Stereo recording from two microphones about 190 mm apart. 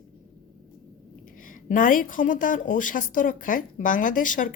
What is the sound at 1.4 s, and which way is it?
A woman's voice, 45° left (ahead or behind).